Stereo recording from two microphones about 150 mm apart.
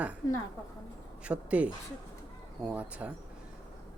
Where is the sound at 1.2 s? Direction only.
10° right (ahead or behind).